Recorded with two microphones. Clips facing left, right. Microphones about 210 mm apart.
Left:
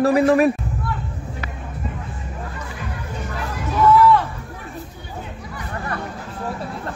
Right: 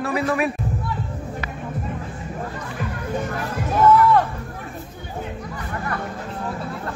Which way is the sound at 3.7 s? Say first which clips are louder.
Left 1 dB; 45° right (ahead or behind).